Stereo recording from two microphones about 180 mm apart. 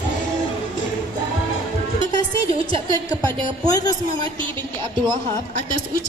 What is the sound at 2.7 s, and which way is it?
Speech, 25° right (ahead or behind).